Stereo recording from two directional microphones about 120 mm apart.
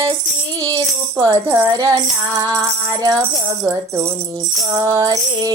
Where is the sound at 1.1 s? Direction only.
20° right (ahead or behind).